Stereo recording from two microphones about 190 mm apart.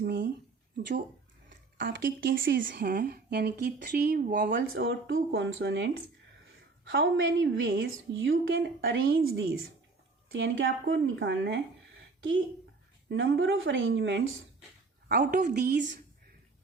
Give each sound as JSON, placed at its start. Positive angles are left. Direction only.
{"t": 0.0, "sound": "a sound", "side_deg": -65}
{"t": 1.5, "sound": "speech", "side_deg": -70}
{"t": 2.7, "sound": "speech", "side_deg": -45}
{"t": 6.8, "sound": "a woman's voice", "side_deg": -75}
{"t": 13.1, "sound": "a woman's voice", "side_deg": -80}
{"t": 15.1, "sound": "a woman's voice", "side_deg": -45}